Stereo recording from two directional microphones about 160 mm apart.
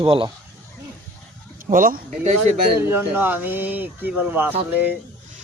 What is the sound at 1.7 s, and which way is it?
Speech, 60° right (ahead or behind).